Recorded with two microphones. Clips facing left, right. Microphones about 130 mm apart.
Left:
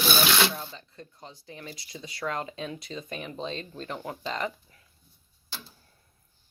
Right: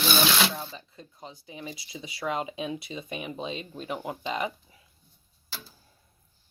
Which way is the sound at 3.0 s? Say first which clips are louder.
Right 1 dB; 10° right (ahead or behind).